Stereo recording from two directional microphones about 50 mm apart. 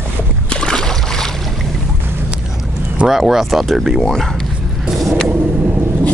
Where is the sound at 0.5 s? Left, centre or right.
Centre.